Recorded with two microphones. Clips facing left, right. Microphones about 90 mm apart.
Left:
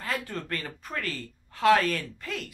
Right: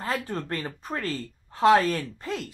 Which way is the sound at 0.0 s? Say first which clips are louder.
Right 3 dB; 30° right (ahead or behind).